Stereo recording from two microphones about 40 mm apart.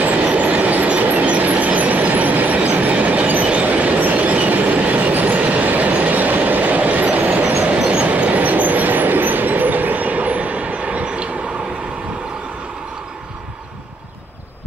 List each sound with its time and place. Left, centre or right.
0.0 s train: right